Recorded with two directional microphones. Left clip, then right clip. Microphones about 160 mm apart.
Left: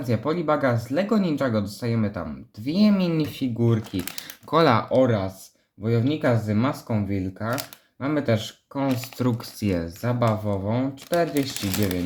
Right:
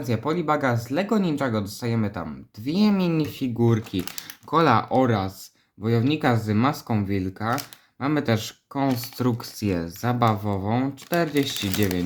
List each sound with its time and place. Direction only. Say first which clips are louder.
0.1 s speech: even; 10° right (ahead or behind)
3.6 s speech: right 3 dB; 25° right (ahead or behind)
4.4 s speech: even; centre (ahead or behind)
4.9 s speech: left 1 dB; 25° right (ahead or behind); by 9.9 s 5° right (ahead or behind)
10.0 s speech: right 3 dB; 25° right (ahead or behind)